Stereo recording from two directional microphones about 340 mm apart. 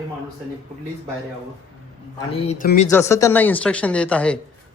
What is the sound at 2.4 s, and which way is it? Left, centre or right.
Speech, left.